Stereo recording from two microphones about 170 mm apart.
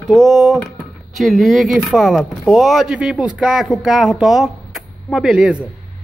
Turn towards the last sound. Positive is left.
turn(degrees=-5)  # may be behind; listen again after turning